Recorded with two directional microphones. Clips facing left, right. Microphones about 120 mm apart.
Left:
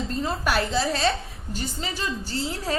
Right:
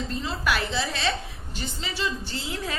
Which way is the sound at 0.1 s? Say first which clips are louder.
Left 3 dB; 40° left (ahead or behind).